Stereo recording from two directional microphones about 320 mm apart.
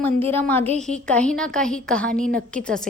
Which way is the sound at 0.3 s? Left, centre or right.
Centre.